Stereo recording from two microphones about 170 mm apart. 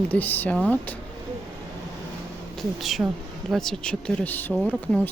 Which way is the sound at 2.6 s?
Centre (ahead or behind).